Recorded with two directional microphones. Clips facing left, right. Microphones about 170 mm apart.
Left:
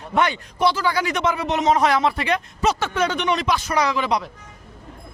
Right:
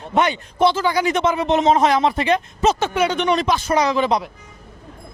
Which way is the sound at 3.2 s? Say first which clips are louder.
Right 3 dB; 30° right (ahead or behind).